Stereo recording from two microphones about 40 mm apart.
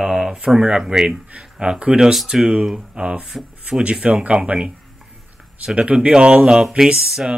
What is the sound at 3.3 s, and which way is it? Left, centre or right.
Speech, centre.